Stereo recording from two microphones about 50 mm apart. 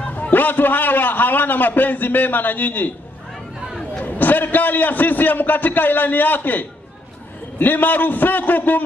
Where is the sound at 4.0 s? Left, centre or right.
Left.